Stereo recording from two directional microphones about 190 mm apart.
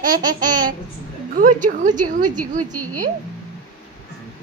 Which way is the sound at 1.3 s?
45° right (ahead or behind).